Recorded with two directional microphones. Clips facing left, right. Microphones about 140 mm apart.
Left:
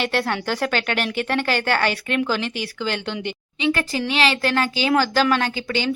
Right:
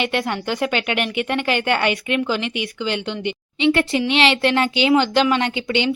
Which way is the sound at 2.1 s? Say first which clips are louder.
Right 1 dB; centre (ahead or behind).